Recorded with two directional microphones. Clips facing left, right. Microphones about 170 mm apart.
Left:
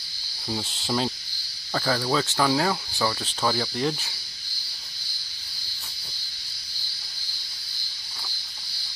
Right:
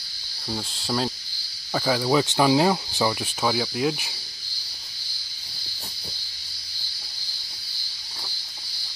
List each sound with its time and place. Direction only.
0.5 s cricket: centre (ahead or behind)